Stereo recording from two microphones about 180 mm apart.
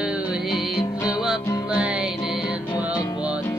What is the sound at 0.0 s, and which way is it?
Music, centre (ahead or behind).